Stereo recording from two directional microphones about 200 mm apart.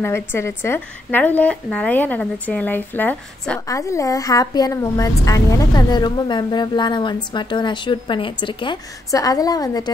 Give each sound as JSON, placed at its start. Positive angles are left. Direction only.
{"t": 0.0, "sound": "a woman's voice", "side_deg": 10}